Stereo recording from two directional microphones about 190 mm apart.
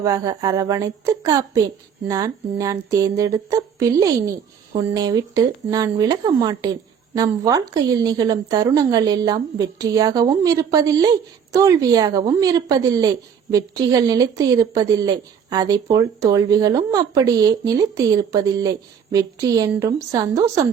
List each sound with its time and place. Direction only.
0.0 s a woman's voice: 20° right (ahead or behind)